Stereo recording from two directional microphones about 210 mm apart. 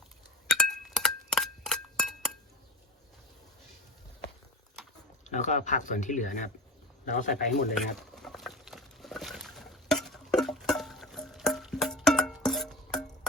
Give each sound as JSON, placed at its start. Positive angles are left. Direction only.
{"t": 0.4, "sound": "chink", "side_deg": 0}
{"t": 5.3, "sound": "speech", "side_deg": 35}
{"t": 7.9, "sound": "a sound", "side_deg": 0}